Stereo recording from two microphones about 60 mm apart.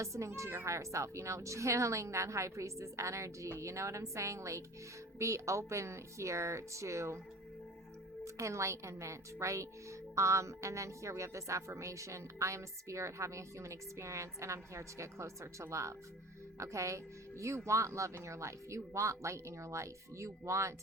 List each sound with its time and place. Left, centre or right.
0.0 s a woman's voice: right
8.2 s a woman's voice: right